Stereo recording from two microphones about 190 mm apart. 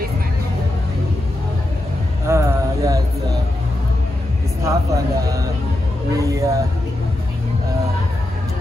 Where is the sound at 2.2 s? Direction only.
15° right (ahead or behind).